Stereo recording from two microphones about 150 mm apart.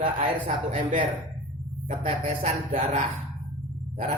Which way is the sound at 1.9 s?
40° right (ahead or behind).